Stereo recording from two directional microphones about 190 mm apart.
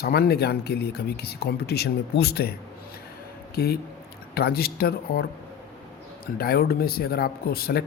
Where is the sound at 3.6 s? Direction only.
55° left (ahead or behind).